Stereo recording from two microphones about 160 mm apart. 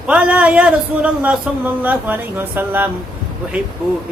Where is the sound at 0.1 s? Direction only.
5° right (ahead or behind).